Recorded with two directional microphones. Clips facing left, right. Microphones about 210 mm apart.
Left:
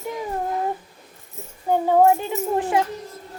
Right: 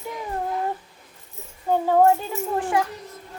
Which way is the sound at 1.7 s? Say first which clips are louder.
Left 1 dB; 15° left (ahead or behind).